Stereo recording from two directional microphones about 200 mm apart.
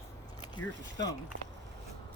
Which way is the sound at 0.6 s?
90° left.